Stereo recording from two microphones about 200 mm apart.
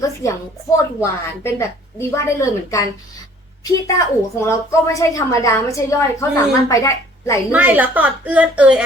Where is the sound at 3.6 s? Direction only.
15° left (ahead or behind).